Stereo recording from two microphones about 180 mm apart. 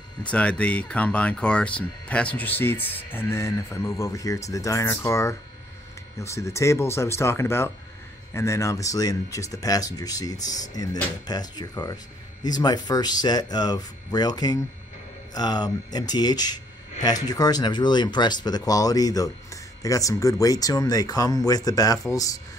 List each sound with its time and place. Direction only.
0.2 s speech: 5° left (ahead or behind)